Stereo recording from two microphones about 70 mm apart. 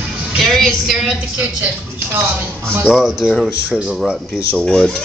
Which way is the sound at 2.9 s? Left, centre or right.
Centre.